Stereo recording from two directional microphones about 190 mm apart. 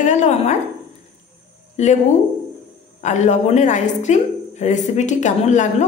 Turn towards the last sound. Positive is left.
turn(degrees=40)  # may be behind; listen again after turning